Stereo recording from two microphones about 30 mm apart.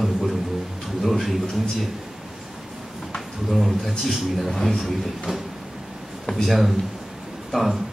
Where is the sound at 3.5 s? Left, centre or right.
Centre.